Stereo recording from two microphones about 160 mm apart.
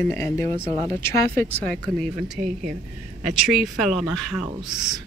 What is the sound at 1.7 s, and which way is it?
Speech, 5° left (ahead or behind).